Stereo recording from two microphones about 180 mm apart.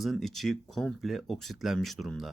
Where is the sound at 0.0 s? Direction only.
Centre (ahead or behind).